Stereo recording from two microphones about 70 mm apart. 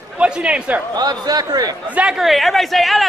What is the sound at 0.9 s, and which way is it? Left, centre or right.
Speech, right.